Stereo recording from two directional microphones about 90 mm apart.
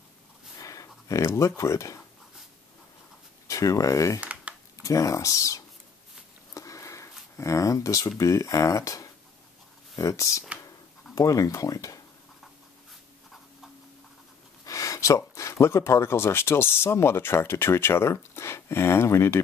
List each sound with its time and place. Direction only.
0.6 s a sound: 40° left (ahead or behind)
3.4 s speech: 40° left (ahead or behind)
4.2 s a sound: 15° right (ahead or behind)
4.8 s speech: 35° left (ahead or behind)
6.5 s sniff: 40° left (ahead or behind)
7.3 s speech: 35° left (ahead or behind)
14.6 s speech: 40° left (ahead or behind)